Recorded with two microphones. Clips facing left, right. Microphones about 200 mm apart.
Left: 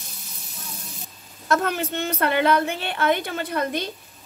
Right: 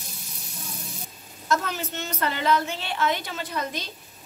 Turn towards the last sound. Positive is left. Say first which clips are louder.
# left 6 dB
turn(degrees=55)  # may be behind; listen again after turning